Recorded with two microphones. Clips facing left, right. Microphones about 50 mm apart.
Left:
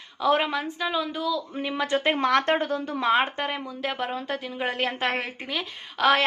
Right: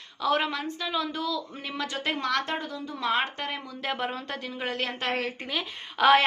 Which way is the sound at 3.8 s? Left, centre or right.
Centre.